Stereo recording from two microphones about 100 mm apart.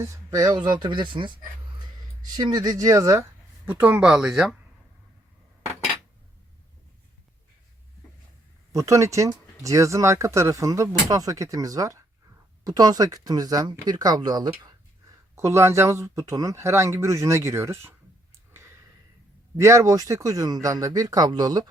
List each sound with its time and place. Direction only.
0.0 s speech: 30° right (ahead or behind); by 1.4 s 55° right (ahead or behind)
2.3 s speech: 45° right (ahead or behind)
3.7 s speech: 15° right (ahead or behind)
8.7 s speech: 35° right (ahead or behind)
15.4 s speech: 25° right (ahead or behind)
19.5 s speech: 30° right (ahead or behind)